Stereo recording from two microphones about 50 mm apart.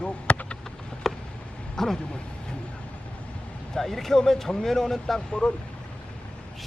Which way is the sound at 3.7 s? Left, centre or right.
Centre.